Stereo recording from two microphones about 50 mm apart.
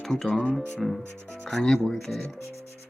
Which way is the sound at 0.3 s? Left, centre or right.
Centre.